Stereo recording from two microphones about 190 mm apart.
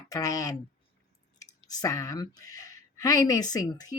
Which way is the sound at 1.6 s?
20° left (ahead or behind).